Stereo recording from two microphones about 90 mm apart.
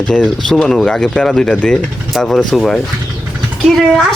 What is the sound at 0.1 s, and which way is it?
Speech, 5° left (ahead or behind).